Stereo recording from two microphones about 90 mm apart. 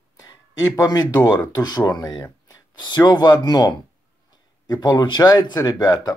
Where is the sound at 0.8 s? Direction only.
45° left (ahead or behind).